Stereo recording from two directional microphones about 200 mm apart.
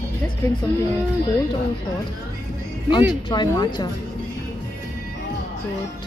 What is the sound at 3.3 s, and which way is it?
Speech, 20° left (ahead or behind).